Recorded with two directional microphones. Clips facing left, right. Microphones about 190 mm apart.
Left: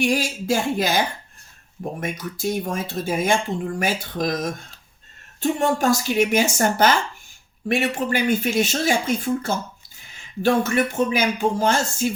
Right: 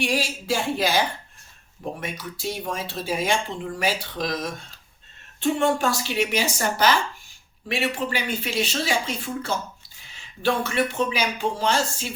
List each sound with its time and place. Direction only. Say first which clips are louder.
0.0 s speech: left 4 dB; 45° left (ahead or behind)